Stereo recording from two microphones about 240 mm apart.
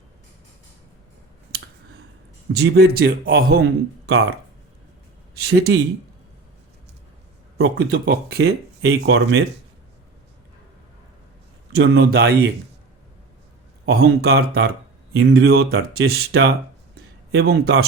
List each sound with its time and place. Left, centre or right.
2.5 s a man's voice: right
5.4 s speech: right
7.6 s speech: right
11.7 s speech: right
13.8 s a man's voice: right
16.9 s a sound: right